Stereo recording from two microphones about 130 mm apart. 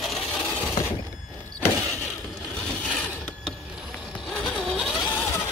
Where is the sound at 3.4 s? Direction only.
5° right (ahead or behind).